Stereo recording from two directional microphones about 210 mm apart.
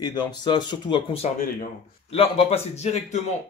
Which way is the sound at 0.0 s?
20° left (ahead or behind).